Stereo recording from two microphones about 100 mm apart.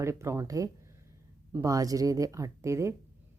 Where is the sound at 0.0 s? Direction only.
30° right (ahead or behind).